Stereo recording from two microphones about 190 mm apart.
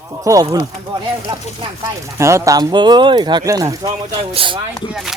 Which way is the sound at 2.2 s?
15° right (ahead or behind).